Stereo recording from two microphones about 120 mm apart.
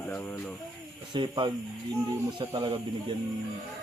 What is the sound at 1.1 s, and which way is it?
Speech, 40° right (ahead or behind).